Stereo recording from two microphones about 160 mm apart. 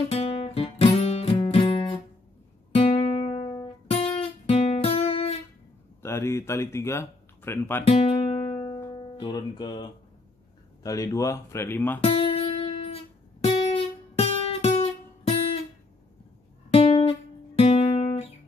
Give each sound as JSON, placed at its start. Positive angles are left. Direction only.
{"t": 0.1, "sound": "guitar", "side_deg": 35}
{"t": 1.5, "sound": "music", "side_deg": 30}
{"t": 2.7, "sound": "guitar", "side_deg": 40}
{"t": 6.0, "sound": "speech", "side_deg": 15}
{"t": 7.8, "sound": "music", "side_deg": 35}
{"t": 8.9, "sound": "speech", "side_deg": 30}
{"t": 12.0, "sound": "music", "side_deg": 35}
{"t": 16.7, "sound": "music", "side_deg": 35}
{"t": 17.6, "sound": "guitar", "side_deg": 40}